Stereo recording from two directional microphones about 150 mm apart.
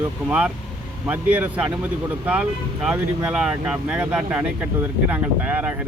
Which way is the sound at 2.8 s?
10° right (ahead or behind).